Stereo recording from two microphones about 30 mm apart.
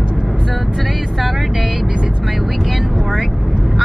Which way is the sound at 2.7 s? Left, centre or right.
Centre.